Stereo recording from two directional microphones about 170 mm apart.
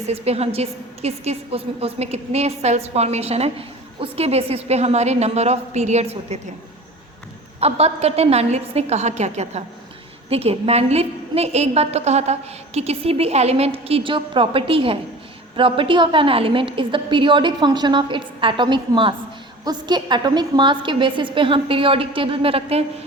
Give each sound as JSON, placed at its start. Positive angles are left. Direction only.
{"t": 0.0, "sound": "a woman's voice", "side_deg": -35}
{"t": 7.6, "sound": "a woman's voice", "side_deg": -35}